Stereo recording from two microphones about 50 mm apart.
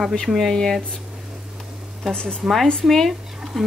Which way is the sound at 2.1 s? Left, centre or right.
Centre.